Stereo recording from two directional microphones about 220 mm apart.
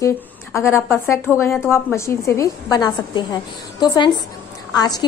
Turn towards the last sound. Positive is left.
turn(degrees=15)  # may be behind; listen again after turning